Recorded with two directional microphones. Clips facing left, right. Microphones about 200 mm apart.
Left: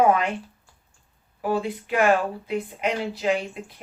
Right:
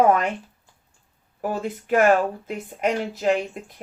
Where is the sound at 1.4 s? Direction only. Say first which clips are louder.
Left 2 dB; 45° right (ahead or behind).